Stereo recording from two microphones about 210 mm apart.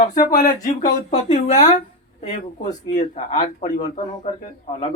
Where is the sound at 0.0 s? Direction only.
40° left (ahead or behind).